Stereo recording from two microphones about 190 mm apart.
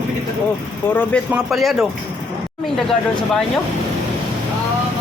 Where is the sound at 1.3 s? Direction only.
Centre (ahead or behind).